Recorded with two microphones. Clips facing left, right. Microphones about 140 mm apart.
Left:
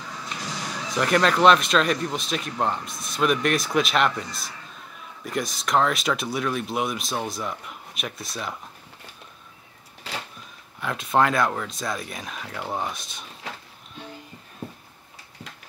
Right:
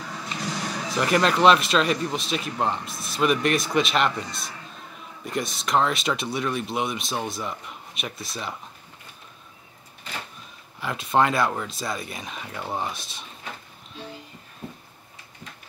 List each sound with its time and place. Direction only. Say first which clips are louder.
0.8 s speech: left 1 dB; centre (ahead or behind)
10.1 s a sound: left 2 dB; 90° left
10.8 s speech: even; centre (ahead or behind)